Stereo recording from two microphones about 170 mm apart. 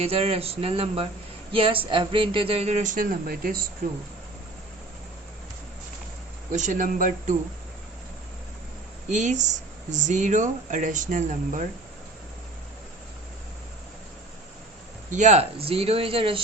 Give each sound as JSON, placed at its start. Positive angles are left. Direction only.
{"t": 0.0, "sound": "speech", "side_deg": -35}
{"t": 6.5, "sound": "speech", "side_deg": -45}
{"t": 9.0, "sound": "speech", "side_deg": -45}
{"t": 15.1, "sound": "speech", "side_deg": -40}